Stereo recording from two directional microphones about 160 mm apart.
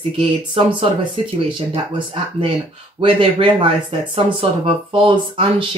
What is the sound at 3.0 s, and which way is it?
Speech, 35° right (ahead or behind).